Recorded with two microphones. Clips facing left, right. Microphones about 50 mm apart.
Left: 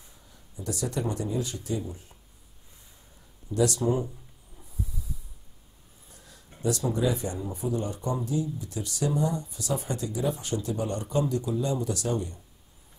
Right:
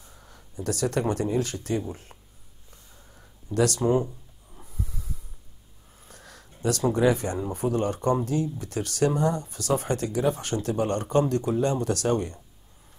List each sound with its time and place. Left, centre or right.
0.2 s speech: right
3.5 s speech: right
4.6 s snort: right
6.0 s speech: right